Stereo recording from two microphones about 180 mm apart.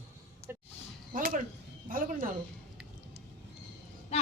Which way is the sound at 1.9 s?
50° right (ahead or behind).